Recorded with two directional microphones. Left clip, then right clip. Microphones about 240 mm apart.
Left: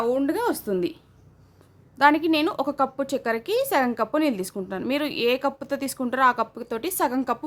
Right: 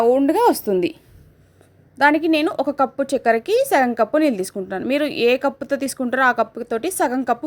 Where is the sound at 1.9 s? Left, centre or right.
Centre.